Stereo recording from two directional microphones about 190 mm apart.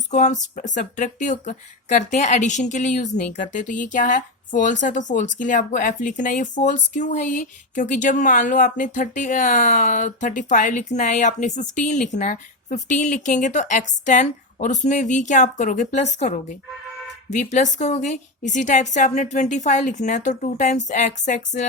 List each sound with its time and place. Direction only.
0.1 s a woman's voice: 40° left (ahead or behind)